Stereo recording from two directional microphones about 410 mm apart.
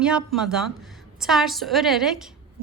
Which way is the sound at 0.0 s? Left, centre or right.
Centre.